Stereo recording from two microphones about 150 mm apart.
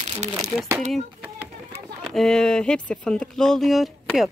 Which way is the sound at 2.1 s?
5° left (ahead or behind).